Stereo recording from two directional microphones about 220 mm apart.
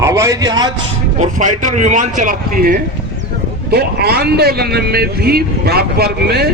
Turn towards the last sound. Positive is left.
turn(degrees=-45)  # may be behind; listen again after turning